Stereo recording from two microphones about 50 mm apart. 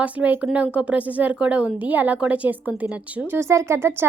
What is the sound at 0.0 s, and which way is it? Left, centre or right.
Speech, right.